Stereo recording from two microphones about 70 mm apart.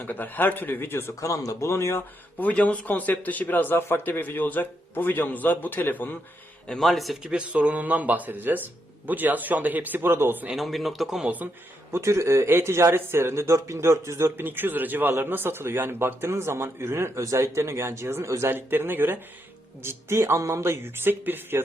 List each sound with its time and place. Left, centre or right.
0.0 s a man's voice: left
1.2 s speech: left
2.4 s a man's voice: centre
6.7 s a man's voice: centre
7.2 s speech: centre; by 10.4 s right
10.5 s a man's voice: centre
11.9 s speech: right